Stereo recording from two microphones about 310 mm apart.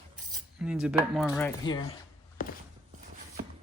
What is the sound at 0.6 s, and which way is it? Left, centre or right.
Speech, centre.